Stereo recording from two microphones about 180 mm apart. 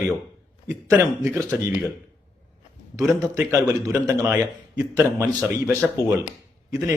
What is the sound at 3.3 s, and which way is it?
A man's voice, 20° right (ahead or behind).